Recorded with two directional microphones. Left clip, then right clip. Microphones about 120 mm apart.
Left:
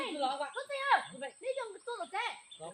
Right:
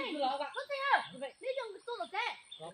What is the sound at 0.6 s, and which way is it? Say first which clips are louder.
Speech: left 2 dB; 50° left (ahead or behind).